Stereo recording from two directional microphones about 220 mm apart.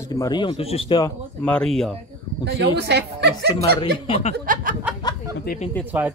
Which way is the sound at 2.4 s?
50° right (ahead or behind).